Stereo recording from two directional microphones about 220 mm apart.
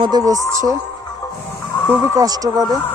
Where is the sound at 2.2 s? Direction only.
15° right (ahead or behind).